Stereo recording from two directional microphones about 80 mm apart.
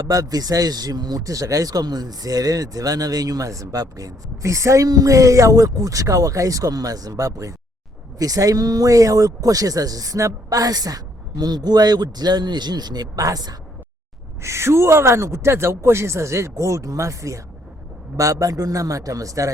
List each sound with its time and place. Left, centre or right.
0.0 s speech: right
14.4 s speech: right